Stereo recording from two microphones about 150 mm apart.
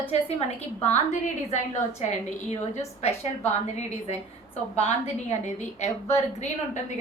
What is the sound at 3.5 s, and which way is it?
A woman's voice, 50° left (ahead or behind).